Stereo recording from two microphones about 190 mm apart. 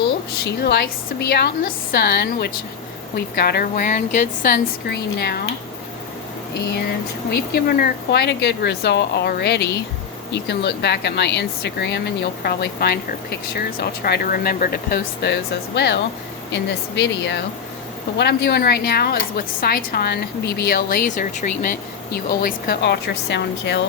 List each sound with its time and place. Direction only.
0.4 s a woman's voice: 60° left (ahead or behind)
7.3 s a woman's voice: 55° left (ahead or behind)